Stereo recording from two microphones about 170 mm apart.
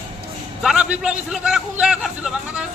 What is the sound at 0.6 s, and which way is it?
A man's voice, 5° right (ahead or behind).